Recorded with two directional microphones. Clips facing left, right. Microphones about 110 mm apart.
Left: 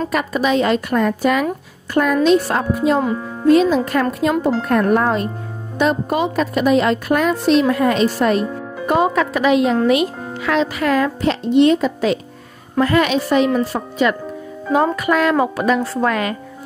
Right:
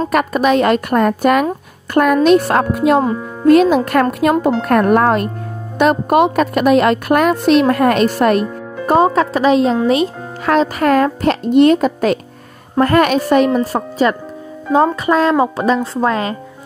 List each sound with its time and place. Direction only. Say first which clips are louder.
0.1 s a woman's voice: right 5 dB; 55° right (ahead or behind)
8.8 s speech: right 4 dB; 35° right (ahead or behind)
10.4 s speech: right 4 dB; 45° right (ahead or behind)
13.5 s speech: right 3 dB; 40° right (ahead or behind)
14.7 s a woman's voice: right 3 dB; 30° right (ahead or behind)